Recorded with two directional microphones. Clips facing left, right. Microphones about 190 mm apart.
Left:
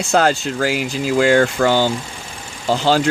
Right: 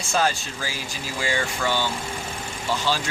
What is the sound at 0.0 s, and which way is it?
Speech, 70° left (ahead or behind).